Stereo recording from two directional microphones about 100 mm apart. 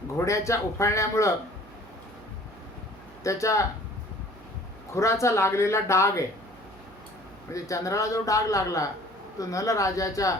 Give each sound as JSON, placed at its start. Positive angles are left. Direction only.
{"t": 0.2, "sound": "a man's voice", "side_deg": 30}
{"t": 3.2, "sound": "a man's voice", "side_deg": 30}
{"t": 4.9, "sound": "speech", "side_deg": 30}
{"t": 7.5, "sound": "a man's voice", "side_deg": 35}